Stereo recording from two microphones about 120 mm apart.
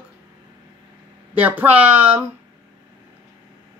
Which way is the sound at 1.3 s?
15° right (ahead or behind).